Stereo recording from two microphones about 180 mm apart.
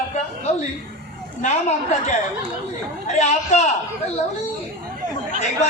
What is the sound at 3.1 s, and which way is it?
Speech, 40° left (ahead or behind).